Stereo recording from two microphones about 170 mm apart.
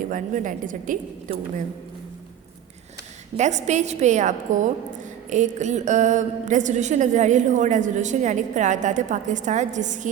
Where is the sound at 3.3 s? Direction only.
45° right (ahead or behind).